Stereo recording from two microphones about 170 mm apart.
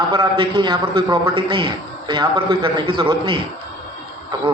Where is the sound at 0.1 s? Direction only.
25° right (ahead or behind).